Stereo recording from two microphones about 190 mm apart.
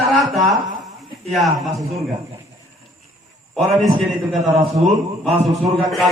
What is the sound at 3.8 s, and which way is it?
Speech, 25° right (ahead or behind).